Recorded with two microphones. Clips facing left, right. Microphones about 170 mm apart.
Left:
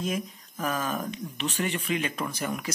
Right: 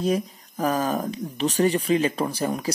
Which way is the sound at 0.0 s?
35° right (ahead or behind).